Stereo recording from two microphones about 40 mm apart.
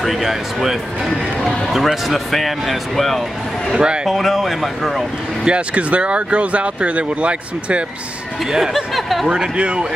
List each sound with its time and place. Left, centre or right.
0.0 s speech: centre
3.7 s speech: right
4.1 s speech: centre
5.4 s speech: right
8.5 s speech: centre
9.3 s speech: right